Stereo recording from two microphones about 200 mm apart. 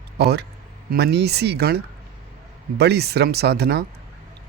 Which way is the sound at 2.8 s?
55° right (ahead or behind).